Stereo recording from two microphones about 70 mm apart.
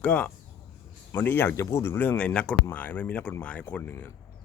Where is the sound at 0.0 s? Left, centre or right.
Left.